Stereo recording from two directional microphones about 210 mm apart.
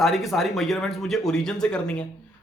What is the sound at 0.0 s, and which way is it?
Speech, centre (ahead or behind).